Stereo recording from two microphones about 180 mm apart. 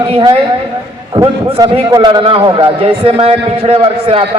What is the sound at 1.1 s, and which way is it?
A man's voice, 20° right (ahead or behind).